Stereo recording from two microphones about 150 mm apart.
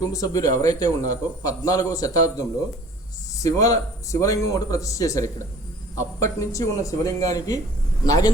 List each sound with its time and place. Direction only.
0.0 s a man's voice: 25° left (ahead or behind)